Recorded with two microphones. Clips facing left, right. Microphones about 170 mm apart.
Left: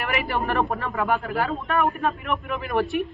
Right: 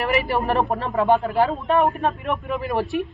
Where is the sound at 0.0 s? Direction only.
25° right (ahead or behind).